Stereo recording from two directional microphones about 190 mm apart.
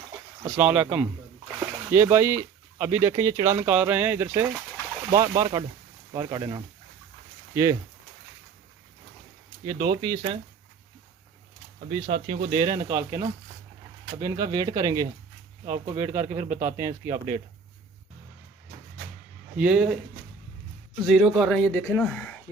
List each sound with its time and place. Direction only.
0.5 s speech: 10° right (ahead or behind)
5.4 s speech: 25° right (ahead or behind)
9.6 s speech: 20° right (ahead or behind)
11.9 s speech: 30° right (ahead or behind)
12.9 s speech: 20° right (ahead or behind); by 17.4 s 45° right (ahead or behind)
19.5 s speech: 5° right (ahead or behind)
21.0 s speech: centre (ahead or behind)